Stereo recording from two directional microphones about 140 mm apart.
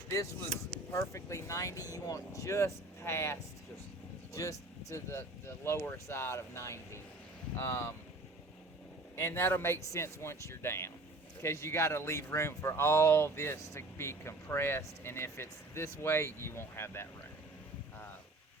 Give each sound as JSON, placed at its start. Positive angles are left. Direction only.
{"t": 0.9, "sound": "speech", "side_deg": 20}
{"t": 4.9, "sound": "speech", "side_deg": 20}
{"t": 9.1, "sound": "speech", "side_deg": 15}